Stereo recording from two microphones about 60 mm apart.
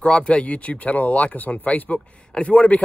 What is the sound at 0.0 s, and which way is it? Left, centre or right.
Speech, centre.